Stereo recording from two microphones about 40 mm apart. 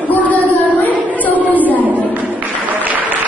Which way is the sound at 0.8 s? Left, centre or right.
Left.